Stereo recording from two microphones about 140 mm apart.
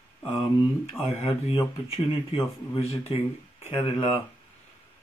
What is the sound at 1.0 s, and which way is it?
Speech, 45° left (ahead or behind).